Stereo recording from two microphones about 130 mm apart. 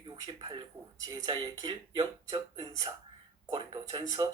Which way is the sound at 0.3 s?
35° right (ahead or behind).